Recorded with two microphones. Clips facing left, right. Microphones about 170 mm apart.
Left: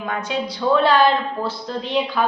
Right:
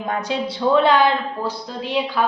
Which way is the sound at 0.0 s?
35° right (ahead or behind).